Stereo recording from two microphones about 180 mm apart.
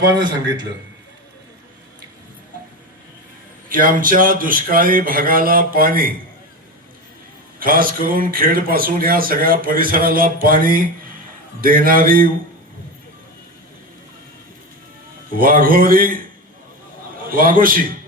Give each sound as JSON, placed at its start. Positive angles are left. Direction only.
{"t": 3.7, "sound": "speech", "side_deg": -50}
{"t": 7.6, "sound": "speech", "side_deg": -55}
{"t": 15.3, "sound": "speech", "side_deg": -50}
{"t": 17.2, "sound": "speech", "side_deg": -50}